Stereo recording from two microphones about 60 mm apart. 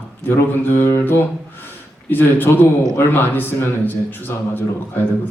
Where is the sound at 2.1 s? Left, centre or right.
Left.